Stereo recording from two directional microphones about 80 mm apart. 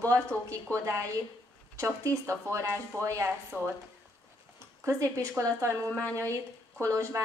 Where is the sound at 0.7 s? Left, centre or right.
Right.